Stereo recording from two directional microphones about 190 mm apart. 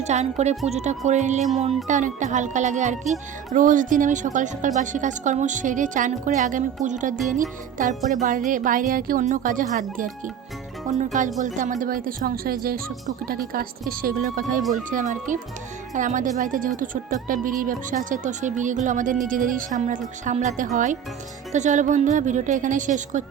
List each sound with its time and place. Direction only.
0.0 s a woman's voice: 35° right (ahead or behind)